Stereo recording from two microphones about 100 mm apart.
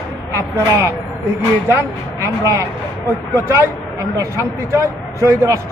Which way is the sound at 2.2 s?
30° right (ahead or behind).